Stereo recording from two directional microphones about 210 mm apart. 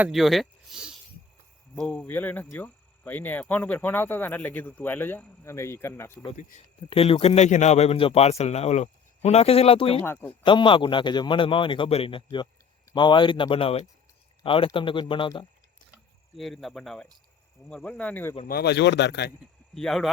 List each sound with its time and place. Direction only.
0.0 s speech: centre (ahead or behind)
6.9 s a man's voice: 25° left (ahead or behind)
10.0 s speech: 10° left (ahead or behind)
10.4 s a man's voice: 25° left (ahead or behind)
16.3 s speech: centre (ahead or behind)
18.4 s a man's voice: 50° left (ahead or behind)
19.7 s speech: centre (ahead or behind)